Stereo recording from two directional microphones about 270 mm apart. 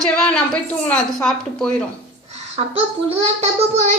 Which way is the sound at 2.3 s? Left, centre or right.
Right.